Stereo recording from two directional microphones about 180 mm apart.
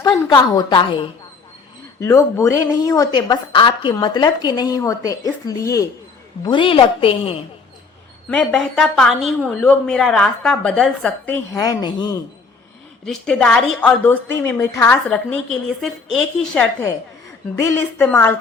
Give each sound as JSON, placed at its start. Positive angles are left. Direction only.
{"t": 0.0, "sound": "a woman's voice", "side_deg": 25}
{"t": 2.0, "sound": "a woman's voice", "side_deg": 15}
{"t": 8.3, "sound": "a woman's voice", "side_deg": 5}
{"t": 11.5, "sound": "a woman's voice", "side_deg": 20}
{"t": 13.1, "sound": "a woman's voice", "side_deg": 5}
{"t": 15.1, "sound": "a woman's voice", "side_deg": 0}